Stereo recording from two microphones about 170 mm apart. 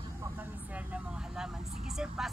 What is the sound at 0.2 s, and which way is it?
Vehicle, 10° right (ahead or behind).